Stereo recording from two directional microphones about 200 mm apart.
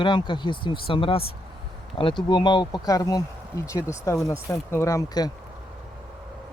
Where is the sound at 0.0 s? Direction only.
25° left (ahead or behind).